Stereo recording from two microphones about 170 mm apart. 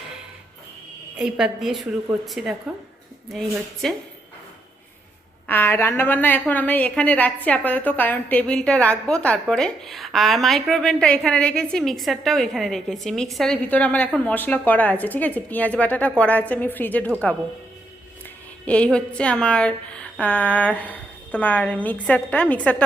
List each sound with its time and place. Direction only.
1.2 s a woman's voice: 5° right (ahead or behind)
5.5 s a woman's voice: 10° left (ahead or behind)
18.6 s a woman's voice: 5° left (ahead or behind)